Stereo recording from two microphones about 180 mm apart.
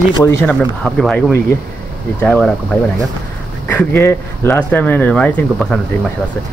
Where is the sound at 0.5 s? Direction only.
5° left (ahead or behind).